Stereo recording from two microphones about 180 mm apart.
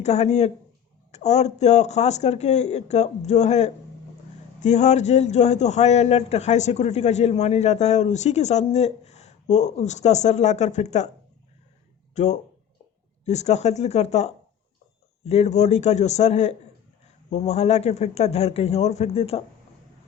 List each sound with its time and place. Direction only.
0.0 s a man's voice: 40° left (ahead or behind)
12.1 s a man's voice: 40° left (ahead or behind)